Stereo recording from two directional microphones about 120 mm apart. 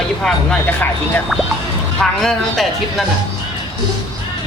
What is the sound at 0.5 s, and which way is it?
Speech, 15° left (ahead or behind).